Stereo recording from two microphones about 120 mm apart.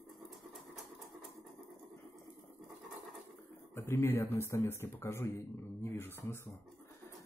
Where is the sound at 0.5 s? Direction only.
Centre (ahead or behind).